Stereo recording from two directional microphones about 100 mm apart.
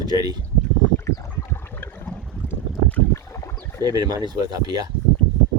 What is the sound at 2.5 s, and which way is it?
Boat, 15° left (ahead or behind).